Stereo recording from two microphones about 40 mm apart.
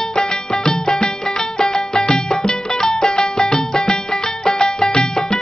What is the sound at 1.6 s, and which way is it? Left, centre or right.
Music, centre.